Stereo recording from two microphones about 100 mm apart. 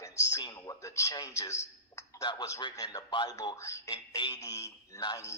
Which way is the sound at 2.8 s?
40° left (ahead or behind).